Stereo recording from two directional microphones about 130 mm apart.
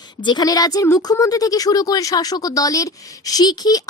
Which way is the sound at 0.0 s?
35° left (ahead or behind).